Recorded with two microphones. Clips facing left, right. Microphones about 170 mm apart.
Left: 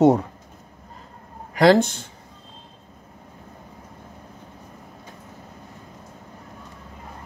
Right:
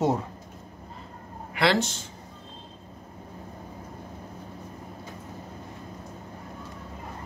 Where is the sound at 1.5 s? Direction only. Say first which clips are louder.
Left 9 dB; 45° left (ahead or behind).